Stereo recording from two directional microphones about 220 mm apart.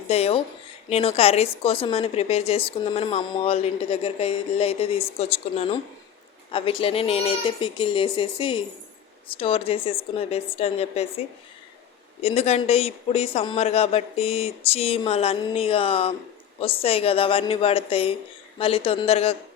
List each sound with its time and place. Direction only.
0.1 s a woman's voice: 25° left (ahead or behind)
12.2 s a woman's voice: 30° left (ahead or behind)